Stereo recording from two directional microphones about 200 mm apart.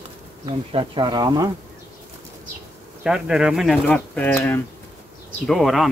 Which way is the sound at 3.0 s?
5° right (ahead or behind).